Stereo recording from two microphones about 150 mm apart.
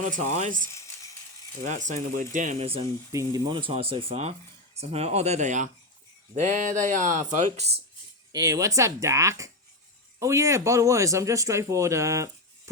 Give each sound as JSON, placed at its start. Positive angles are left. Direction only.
{"t": 0.0, "sound": "speech", "side_deg": -55}
{"t": 0.7, "sound": "a sound", "side_deg": 20}
{"t": 1.6, "sound": "speech", "side_deg": -55}
{"t": 3.1, "sound": "speech", "side_deg": -25}
{"t": 8.3, "sound": "speech", "side_deg": -25}